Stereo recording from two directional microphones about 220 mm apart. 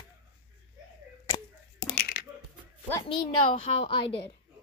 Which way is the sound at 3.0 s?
25° left (ahead or behind).